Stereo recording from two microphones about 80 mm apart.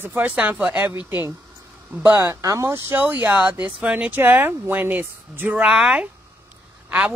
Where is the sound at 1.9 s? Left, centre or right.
Right.